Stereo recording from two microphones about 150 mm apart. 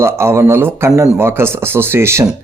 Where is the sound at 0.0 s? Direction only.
15° right (ahead or behind).